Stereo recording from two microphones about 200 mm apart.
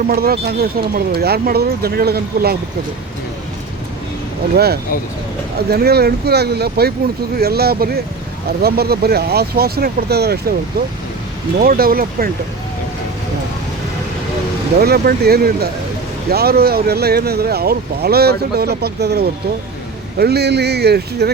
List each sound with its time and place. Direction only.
0.1 s speech: 50° right (ahead or behind)
4.5 s speech: 50° right (ahead or behind)
11.6 s speech: 45° right (ahead or behind)
14.8 s speech: 50° right (ahead or behind)